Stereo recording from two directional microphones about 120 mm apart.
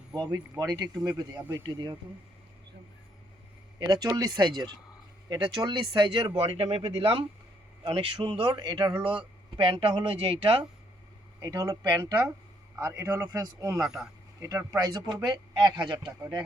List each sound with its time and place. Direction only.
0.1 s speech: 30° right (ahead or behind)
3.8 s speech: 35° right (ahead or behind)
11.3 s a man's voice: 30° right (ahead or behind)
13.7 s speech: 5° right (ahead or behind)
14.4 s a man's voice: 20° right (ahead or behind)
14.8 s speech: 35° right (ahead or behind)